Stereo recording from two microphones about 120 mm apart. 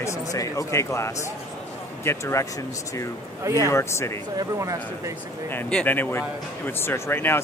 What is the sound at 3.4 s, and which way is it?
Speech, 25° right (ahead or behind).